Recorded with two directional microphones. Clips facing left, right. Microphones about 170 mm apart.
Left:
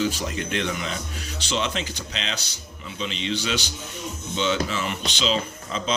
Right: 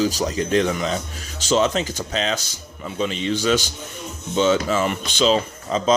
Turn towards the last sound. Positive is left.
turn(degrees=-45)  # may be behind; listen again after turning